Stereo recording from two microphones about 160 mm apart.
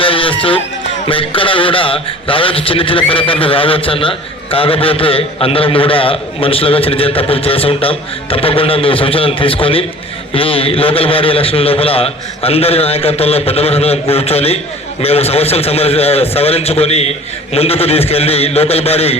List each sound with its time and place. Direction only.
0.0 s music: 35° left (ahead or behind)
1.0 s a man's voice: 35° left (ahead or behind)